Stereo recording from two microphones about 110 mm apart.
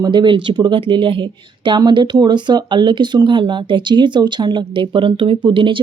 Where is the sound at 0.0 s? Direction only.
45° right (ahead or behind).